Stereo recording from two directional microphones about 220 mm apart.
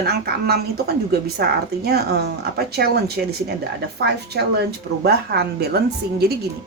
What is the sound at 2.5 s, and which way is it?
Speech, 45° right (ahead or behind).